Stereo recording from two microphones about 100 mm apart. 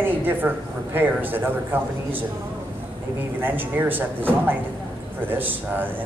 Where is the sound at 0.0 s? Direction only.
20° right (ahead or behind).